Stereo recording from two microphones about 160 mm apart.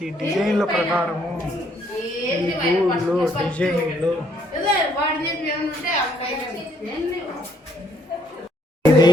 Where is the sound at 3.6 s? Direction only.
5° left (ahead or behind).